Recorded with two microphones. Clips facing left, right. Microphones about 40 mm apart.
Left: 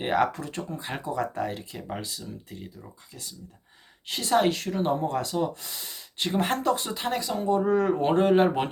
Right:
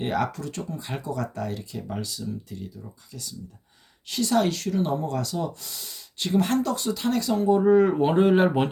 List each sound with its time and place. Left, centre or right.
0.0 s speech: left
4.1 s a woman's voice: left
7.2 s speech: centre